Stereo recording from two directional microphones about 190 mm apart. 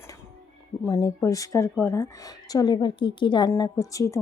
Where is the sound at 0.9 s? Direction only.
15° left (ahead or behind).